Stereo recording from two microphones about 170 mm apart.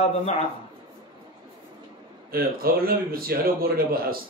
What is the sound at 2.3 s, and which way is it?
A man's voice, 60° right (ahead or behind).